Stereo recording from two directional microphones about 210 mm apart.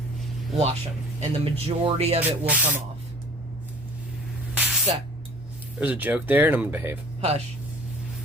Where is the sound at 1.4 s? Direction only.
25° right (ahead or behind).